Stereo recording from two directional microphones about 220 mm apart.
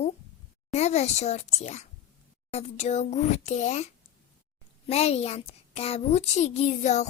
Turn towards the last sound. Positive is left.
turn(degrees=30)  # may be behind; listen again after turning